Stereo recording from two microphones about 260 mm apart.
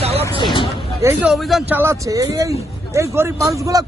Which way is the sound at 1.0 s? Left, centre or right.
Centre.